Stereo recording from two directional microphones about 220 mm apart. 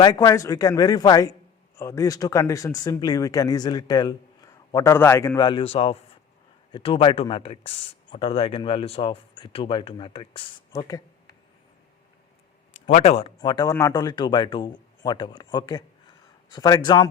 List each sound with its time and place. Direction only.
0.0 s speech: 15° left (ahead or behind)
12.8 s speech: 30° left (ahead or behind)